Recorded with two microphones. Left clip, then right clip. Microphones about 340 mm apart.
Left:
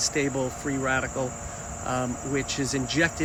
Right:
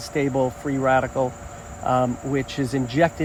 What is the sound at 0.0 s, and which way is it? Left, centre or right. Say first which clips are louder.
Speech: right 4 dB; centre.